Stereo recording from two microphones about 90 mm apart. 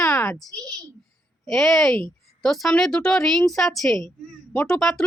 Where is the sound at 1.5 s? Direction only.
5° left (ahead or behind).